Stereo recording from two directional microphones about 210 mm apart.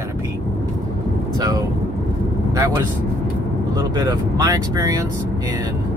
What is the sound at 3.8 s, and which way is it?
Speech, 20° right (ahead or behind).